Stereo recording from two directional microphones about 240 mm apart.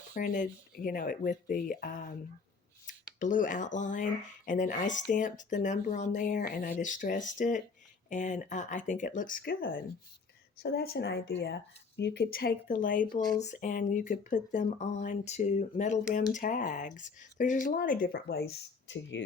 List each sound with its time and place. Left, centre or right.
0.1 s speech: left